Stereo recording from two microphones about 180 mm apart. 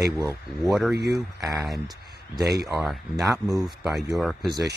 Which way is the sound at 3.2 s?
20° right (ahead or behind).